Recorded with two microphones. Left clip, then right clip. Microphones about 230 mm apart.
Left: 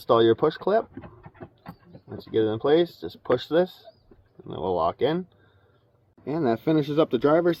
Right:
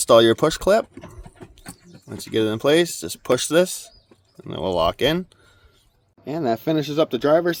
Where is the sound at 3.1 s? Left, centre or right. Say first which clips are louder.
Right 4 dB; right.